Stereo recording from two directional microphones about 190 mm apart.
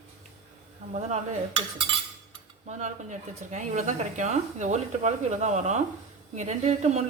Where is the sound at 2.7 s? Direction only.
40° right (ahead or behind).